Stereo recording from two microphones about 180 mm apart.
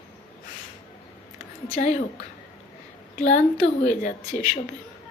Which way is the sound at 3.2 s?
40° left (ahead or behind).